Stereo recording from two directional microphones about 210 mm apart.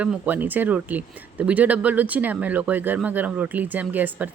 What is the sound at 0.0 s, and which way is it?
Speech, 5° right (ahead or behind).